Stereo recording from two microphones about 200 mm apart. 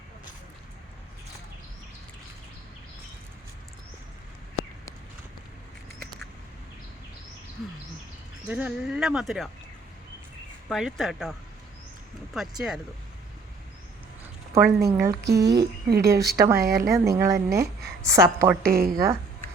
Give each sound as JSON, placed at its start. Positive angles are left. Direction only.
{"t": 8.4, "sound": "speech", "side_deg": -5}
{"t": 10.7, "sound": "speech", "side_deg": 0}
{"t": 14.5, "sound": "speech", "side_deg": -15}
{"t": 15.4, "sound": "a woman's voice", "side_deg": -55}
{"t": 16.0, "sound": "speech", "side_deg": -15}
{"t": 16.6, "sound": "speech", "side_deg": -50}
{"t": 16.9, "sound": "speech", "side_deg": -15}
{"t": 18.6, "sound": "speech", "side_deg": -50}